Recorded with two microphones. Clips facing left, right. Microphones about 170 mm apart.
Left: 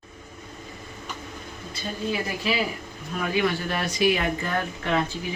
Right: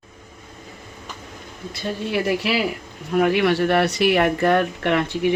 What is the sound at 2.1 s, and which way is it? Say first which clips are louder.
Speech: right 5 dB; 80° right.